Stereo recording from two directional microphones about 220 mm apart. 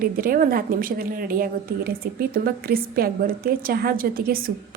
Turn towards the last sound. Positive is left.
turn(degrees=-40)  # may be behind; listen again after turning